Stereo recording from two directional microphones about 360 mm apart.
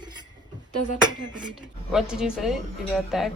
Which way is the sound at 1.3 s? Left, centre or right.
Centre.